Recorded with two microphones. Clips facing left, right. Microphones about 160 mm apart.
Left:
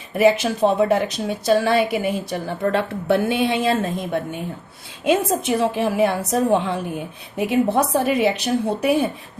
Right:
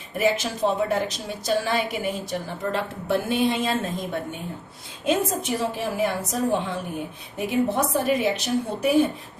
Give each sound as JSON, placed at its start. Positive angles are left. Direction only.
{"t": 0.2, "sound": "a woman's voice", "side_deg": 65}
{"t": 5.0, "sound": "a woman's voice", "side_deg": 70}